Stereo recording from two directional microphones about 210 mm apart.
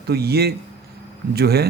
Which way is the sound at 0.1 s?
50° right (ahead or behind).